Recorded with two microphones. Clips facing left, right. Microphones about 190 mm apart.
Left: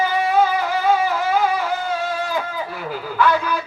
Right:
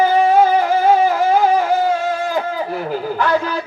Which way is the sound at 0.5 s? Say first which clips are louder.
Right 5 dB; 40° right (ahead or behind).